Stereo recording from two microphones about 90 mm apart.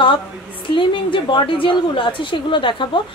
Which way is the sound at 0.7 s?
65° left (ahead or behind).